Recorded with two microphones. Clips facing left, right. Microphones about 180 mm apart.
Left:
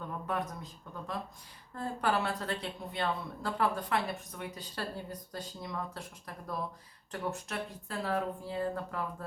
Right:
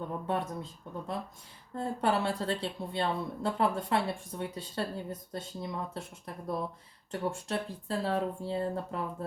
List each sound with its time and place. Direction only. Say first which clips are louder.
0.3 s a woman's voice: right 2 dB; 25° right (ahead or behind)